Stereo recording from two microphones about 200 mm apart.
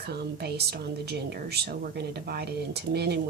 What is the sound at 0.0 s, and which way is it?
Speech, 55° right (ahead or behind).